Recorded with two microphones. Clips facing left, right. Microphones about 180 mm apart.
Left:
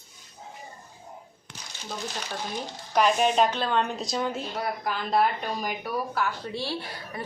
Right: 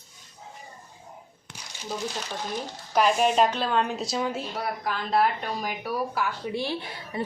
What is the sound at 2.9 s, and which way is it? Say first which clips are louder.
A woman's voice: right 1 dB; 5° right (ahead or behind).